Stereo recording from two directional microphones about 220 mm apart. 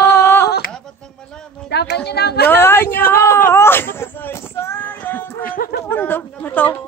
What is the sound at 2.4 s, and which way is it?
Speech, 10° left (ahead or behind).